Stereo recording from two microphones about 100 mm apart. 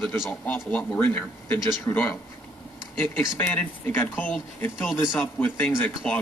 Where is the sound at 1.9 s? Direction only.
30° left (ahead or behind).